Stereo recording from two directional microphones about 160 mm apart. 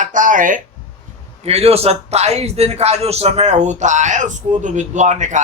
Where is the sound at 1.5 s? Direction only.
40° right (ahead or behind).